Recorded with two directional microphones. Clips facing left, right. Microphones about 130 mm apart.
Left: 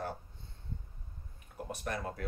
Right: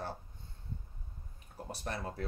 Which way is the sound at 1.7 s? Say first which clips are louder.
Left 2 dB; 30° right (ahead or behind).